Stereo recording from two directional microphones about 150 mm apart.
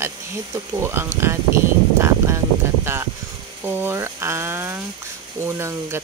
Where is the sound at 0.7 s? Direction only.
15° right (ahead or behind).